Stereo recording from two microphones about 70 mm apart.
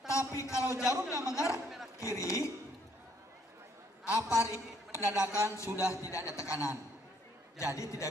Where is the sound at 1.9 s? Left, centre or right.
Left.